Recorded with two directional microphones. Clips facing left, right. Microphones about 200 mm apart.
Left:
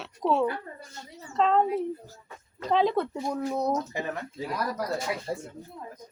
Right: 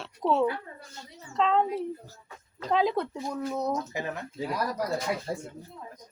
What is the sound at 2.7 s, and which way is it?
Speech, centre (ahead or behind).